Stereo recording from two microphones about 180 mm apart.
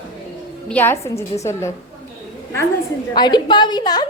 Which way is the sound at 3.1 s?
25° left (ahead or behind).